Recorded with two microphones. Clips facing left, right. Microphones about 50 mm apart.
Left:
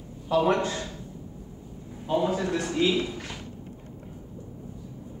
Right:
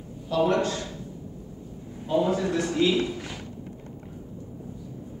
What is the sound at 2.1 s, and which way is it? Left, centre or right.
A man's voice, centre.